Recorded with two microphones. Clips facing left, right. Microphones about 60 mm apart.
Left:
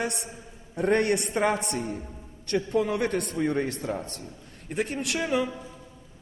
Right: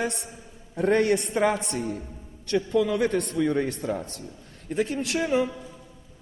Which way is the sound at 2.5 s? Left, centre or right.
Left.